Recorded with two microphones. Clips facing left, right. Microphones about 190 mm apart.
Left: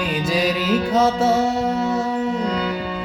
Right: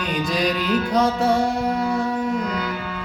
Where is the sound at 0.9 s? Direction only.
5° left (ahead or behind).